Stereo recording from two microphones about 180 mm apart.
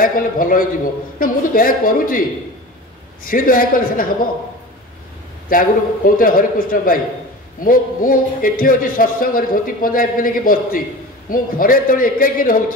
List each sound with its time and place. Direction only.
0.0 s a man's voice: 50° left (ahead or behind)
3.3 s a man's voice: 50° left (ahead or behind)
5.5 s a man's voice: 50° left (ahead or behind)